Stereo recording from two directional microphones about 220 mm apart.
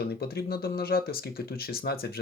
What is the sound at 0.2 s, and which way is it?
Speech, 45° left (ahead or behind).